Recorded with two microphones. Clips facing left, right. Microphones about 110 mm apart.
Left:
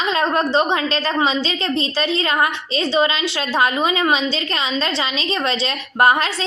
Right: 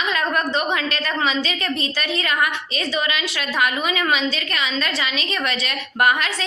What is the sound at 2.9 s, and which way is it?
A woman's voice, 30° left (ahead or behind).